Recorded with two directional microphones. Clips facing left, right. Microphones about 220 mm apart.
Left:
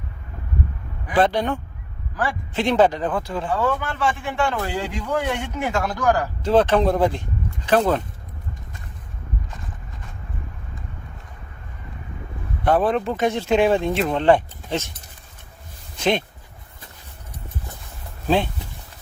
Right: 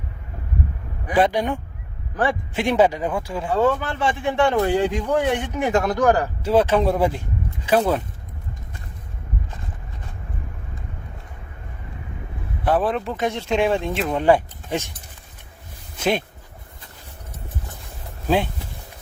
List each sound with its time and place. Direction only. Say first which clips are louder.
1.1 s speech: even; 10° right (ahead or behind)
3.5 s speech: right 4 dB; 25° right (ahead or behind)
6.4 s speech: left 1 dB; 10° right (ahead or behind)
12.6 s speech: left 2 dB; centre (ahead or behind)